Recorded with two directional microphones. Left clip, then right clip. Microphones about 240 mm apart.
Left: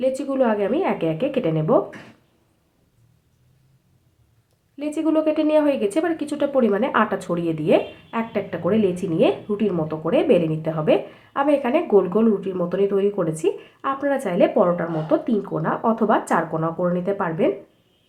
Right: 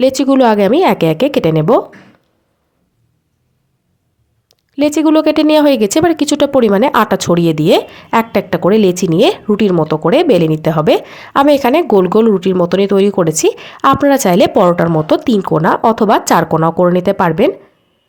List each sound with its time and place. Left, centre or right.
0.0 s speech: right
4.4 s speech: right